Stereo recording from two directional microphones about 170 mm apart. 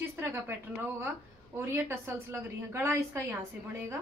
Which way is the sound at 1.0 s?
15° right (ahead or behind).